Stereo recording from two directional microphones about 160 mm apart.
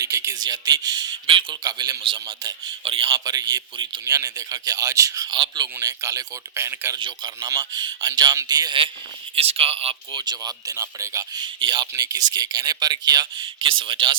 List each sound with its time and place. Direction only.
0.0 s speech: 20° right (ahead or behind)